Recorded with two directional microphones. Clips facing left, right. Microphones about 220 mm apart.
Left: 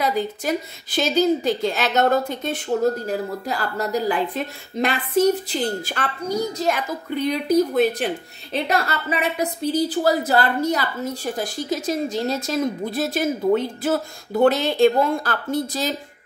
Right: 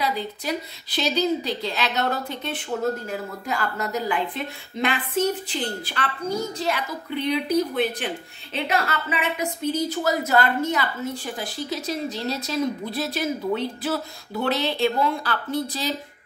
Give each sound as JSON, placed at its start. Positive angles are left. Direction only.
{"t": 0.0, "sound": "a woman's voice", "side_deg": 45}